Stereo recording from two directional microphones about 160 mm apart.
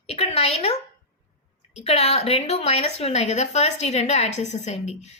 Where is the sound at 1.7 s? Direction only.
40° left (ahead or behind).